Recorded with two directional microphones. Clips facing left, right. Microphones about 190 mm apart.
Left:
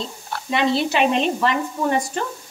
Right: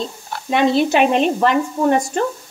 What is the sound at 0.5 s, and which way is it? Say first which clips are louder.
Speech: right 5 dB; 50° right (ahead or behind).